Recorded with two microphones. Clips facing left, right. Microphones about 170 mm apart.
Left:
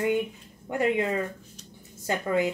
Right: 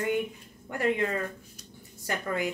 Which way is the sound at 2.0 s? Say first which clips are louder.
Left 5 dB; 20° left (ahead or behind).